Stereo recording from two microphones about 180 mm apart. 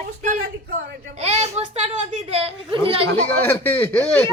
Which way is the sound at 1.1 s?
40° right (ahead or behind).